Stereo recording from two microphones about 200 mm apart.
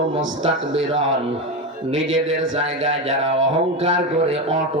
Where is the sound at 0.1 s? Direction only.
75° right (ahead or behind).